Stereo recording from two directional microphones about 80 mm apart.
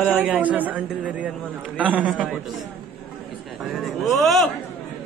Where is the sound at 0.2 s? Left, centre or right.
Centre.